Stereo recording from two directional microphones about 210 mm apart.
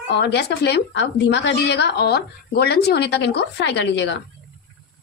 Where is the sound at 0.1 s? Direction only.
55° left (ahead or behind).